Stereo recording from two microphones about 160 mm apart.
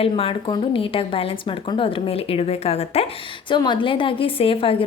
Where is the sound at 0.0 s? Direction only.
35° left (ahead or behind).